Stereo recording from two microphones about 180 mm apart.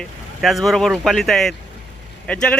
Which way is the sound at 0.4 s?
Centre (ahead or behind).